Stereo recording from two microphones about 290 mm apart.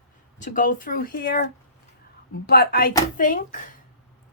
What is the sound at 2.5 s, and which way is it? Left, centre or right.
Speech, left.